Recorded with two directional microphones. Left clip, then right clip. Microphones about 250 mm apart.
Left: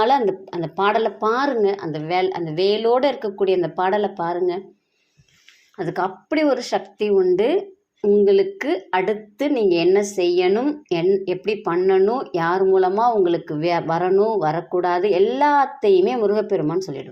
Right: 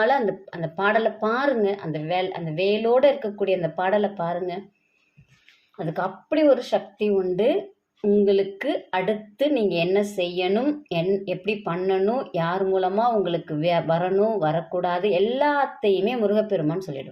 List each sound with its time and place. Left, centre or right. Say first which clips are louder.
0.0 s a woman's voice: left 3 dB; left
5.7 s a woman's voice: left 4 dB; left